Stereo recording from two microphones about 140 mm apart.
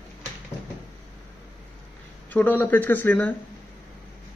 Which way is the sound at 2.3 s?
10° left (ahead or behind).